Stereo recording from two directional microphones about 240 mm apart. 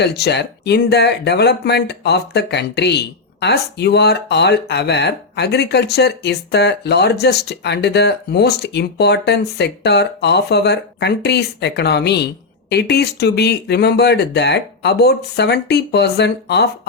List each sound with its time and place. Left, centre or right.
0.0 s speech: left